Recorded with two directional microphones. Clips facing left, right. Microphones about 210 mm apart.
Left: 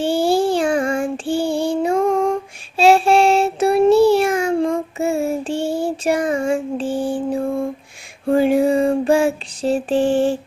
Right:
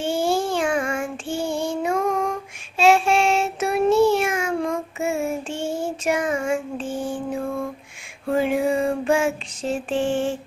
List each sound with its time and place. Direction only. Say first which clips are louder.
0.0 s child singing: left 5 dB; 35° left (ahead or behind)
8.3 s female singing: left 6 dB; 35° left (ahead or behind)